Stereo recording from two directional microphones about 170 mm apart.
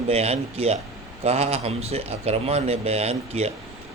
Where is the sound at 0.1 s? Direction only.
35° right (ahead or behind).